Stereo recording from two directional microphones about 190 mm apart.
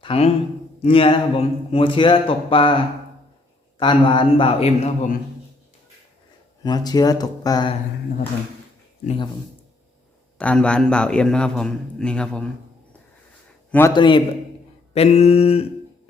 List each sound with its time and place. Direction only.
0.0 s a man's voice: 30° left (ahead or behind)
3.8 s a man's voice: 25° left (ahead or behind)
6.6 s a man's voice: 20° left (ahead or behind)
9.0 s a man's voice: 25° left (ahead or behind)
10.3 s a man's voice: 5° left (ahead or behind)
13.7 s a man's voice: 10° left (ahead or behind)
13.9 s a man's voice: 25° left (ahead or behind)
14.9 s a sound: 35° left (ahead or behind)